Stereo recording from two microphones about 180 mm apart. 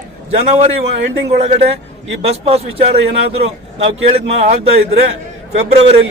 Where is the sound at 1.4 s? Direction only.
35° right (ahead or behind).